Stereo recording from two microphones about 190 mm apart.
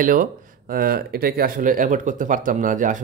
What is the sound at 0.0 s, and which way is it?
Speech, 45° right (ahead or behind).